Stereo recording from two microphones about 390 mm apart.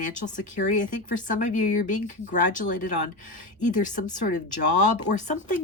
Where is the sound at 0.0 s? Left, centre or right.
Centre.